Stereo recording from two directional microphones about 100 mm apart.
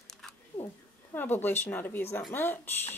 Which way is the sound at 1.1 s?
20° left (ahead or behind).